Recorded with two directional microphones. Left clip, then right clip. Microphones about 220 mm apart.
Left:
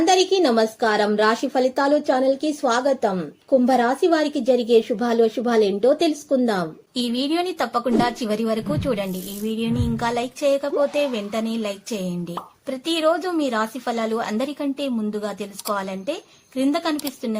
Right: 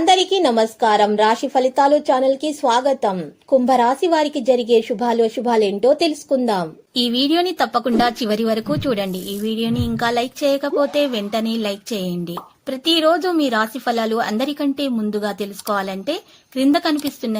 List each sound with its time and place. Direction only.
0.0 s a woman's voice: 15° right (ahead or behind)